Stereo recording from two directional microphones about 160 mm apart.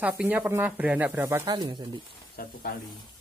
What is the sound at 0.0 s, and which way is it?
Speech, 10° right (ahead or behind).